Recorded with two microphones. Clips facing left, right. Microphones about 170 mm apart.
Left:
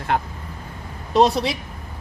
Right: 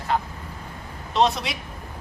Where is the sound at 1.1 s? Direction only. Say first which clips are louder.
Left 5 dB; 40° left (ahead or behind).